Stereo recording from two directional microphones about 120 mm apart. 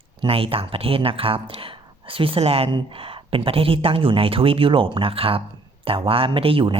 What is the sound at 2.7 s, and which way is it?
Speech, 45° right (ahead or behind).